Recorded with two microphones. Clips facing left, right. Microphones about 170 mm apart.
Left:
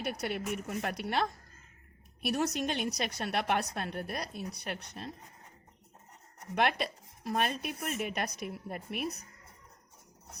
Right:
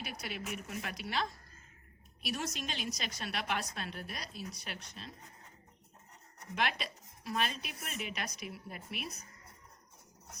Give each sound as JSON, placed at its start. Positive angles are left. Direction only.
{"t": 0.0, "sound": "a woman's voice", "side_deg": 60}
{"t": 6.6, "sound": "a woman's voice", "side_deg": 55}